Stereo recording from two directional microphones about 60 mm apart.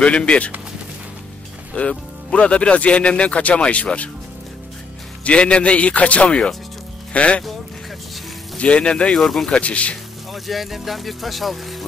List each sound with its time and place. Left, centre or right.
0.0 s speech: centre
1.7 s speech: centre
5.2 s speech: centre
8.5 s speech: centre
9.1 s speech: centre
9.5 s speech: left
10.3 s speech: centre